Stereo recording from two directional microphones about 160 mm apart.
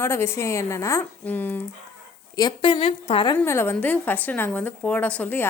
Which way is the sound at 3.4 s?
15° left (ahead or behind).